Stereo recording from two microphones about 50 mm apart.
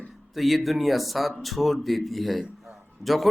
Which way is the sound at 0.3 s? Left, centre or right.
Centre.